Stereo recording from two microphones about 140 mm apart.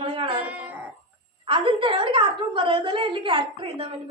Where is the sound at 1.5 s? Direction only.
40° right (ahead or behind).